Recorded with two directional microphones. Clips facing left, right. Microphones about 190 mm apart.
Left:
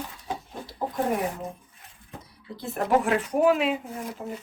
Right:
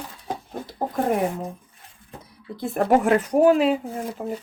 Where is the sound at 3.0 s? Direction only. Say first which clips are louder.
Right 5 dB; 35° right (ahead or behind).